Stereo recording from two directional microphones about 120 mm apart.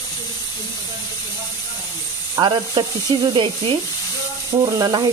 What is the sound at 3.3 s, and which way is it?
Speech, 45° right (ahead or behind).